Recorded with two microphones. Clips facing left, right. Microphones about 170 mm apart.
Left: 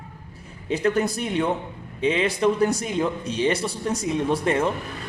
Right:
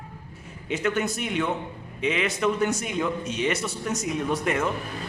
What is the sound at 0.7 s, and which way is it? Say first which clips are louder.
A man's voice: left 4 dB; 35° left (ahead or behind).